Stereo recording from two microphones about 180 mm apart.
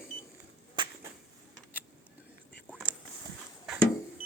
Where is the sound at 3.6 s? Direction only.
Centre (ahead or behind).